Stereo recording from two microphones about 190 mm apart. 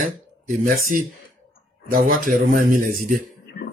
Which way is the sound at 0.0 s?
45° right (ahead or behind).